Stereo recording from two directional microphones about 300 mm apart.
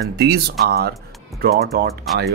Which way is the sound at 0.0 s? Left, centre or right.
Right.